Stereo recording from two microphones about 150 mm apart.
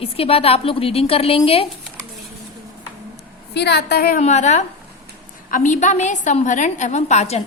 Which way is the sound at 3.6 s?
90° left.